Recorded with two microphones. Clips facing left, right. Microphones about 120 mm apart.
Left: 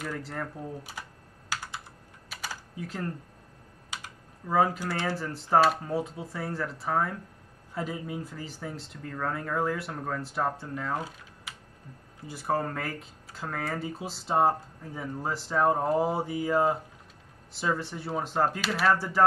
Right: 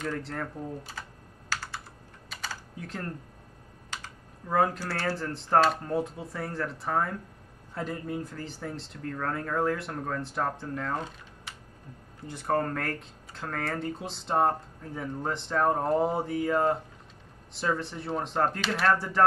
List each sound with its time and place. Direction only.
0.0 s speech: 5° left (ahead or behind)
1.5 s computer keyboard: 15° left (ahead or behind)
2.2 s typing: 5° left (ahead or behind)
4.5 s speech: 5° left (ahead or behind)
4.7 s speech: 15° left (ahead or behind)
5.1 s speech: centre (ahead or behind)